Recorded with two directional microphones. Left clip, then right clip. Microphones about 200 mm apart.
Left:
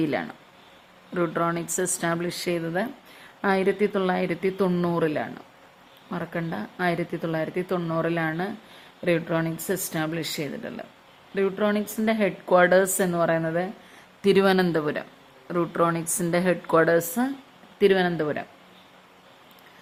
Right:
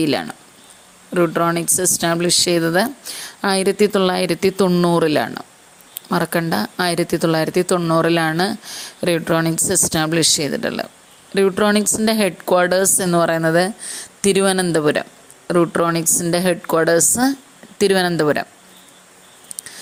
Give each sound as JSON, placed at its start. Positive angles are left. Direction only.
{"t": 0.0, "sound": "speech", "side_deg": -25}